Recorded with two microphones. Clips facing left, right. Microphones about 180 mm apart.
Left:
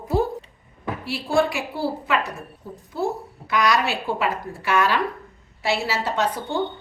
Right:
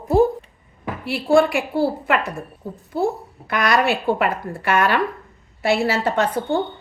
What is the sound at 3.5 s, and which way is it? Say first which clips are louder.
A woman's voice: right 2 dB; 55° right (ahead or behind).